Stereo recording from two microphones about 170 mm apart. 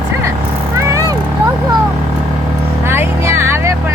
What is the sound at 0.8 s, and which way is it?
Vehicle, 20° right (ahead or behind).